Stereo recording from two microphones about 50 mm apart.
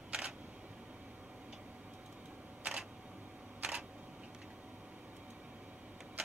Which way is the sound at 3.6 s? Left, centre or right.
Centre.